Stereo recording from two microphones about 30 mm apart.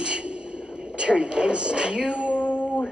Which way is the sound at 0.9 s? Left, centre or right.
Right.